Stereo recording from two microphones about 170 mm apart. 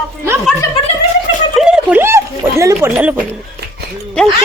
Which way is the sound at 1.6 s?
5° right (ahead or behind).